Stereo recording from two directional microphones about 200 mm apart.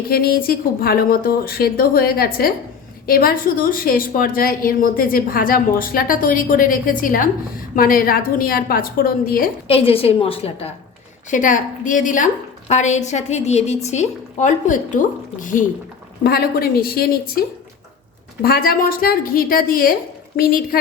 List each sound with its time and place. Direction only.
0.1 s a woman's voice: 50° left (ahead or behind)
9.6 s a woman's voice: 30° left (ahead or behind)
11.3 s a woman's voice: 40° left (ahead or behind)
16.2 s a woman's voice: 50° left (ahead or behind)
18.4 s a woman's voice: 50° left (ahead or behind)